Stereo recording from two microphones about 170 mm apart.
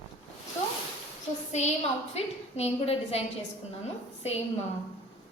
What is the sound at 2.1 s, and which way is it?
A woman's voice, 35° left (ahead or behind).